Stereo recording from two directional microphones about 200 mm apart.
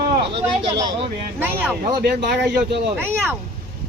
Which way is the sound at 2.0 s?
55° right (ahead or behind).